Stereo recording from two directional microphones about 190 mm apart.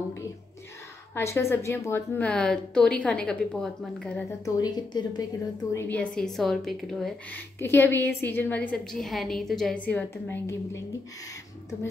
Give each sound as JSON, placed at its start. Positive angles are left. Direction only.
{"t": 1.1, "sound": "speech", "side_deg": 15}
{"t": 4.6, "sound": "a woman's voice", "side_deg": 20}